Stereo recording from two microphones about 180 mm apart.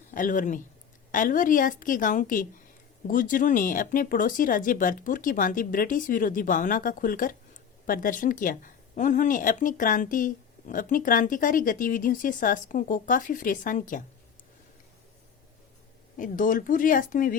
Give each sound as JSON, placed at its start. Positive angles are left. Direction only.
{"t": 0.1, "sound": "speech", "side_deg": 50}
{"t": 16.1, "sound": "speech", "side_deg": 50}